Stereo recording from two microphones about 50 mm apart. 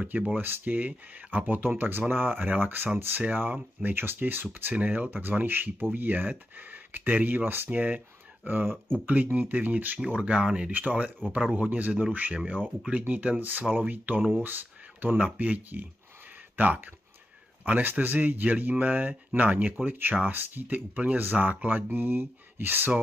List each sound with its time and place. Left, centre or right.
0.0 s speech: right
0.4 s speech: right
3.8 s speech: right
4.7 s speech: right
10.0 s speech: right
10.7 s speech: right